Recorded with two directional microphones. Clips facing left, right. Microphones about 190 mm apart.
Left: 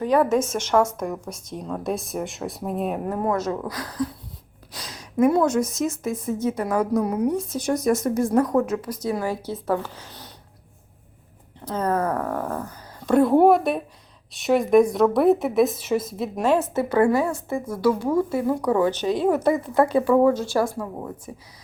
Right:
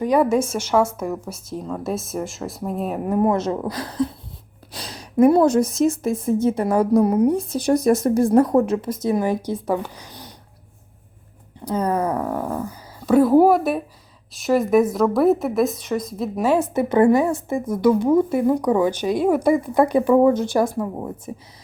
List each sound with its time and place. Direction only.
0.0 s a woman's voice: 10° right (ahead or behind)
3.3 s speech: 25° right (ahead or behind)
11.6 s a woman's voice: 10° right (ahead or behind)